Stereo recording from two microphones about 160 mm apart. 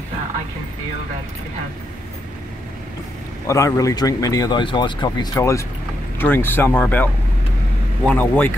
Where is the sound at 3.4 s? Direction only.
20° left (ahead or behind).